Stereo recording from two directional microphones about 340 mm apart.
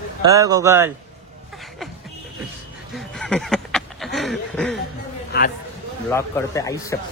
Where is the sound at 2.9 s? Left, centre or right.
Centre.